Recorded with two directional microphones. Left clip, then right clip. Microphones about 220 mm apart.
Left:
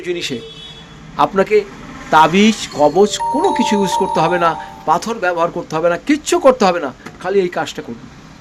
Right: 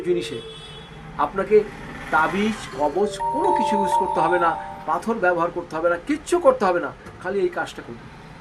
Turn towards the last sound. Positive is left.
turn(degrees=45)  # may be behind; listen again after turning